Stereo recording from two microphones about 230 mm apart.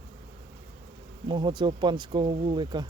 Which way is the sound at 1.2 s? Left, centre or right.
Centre.